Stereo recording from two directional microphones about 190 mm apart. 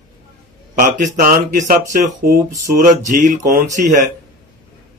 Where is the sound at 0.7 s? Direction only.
40° right (ahead or behind).